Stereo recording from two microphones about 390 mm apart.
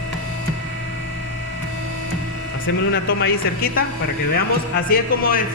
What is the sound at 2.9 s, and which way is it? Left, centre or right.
A man's voice, left.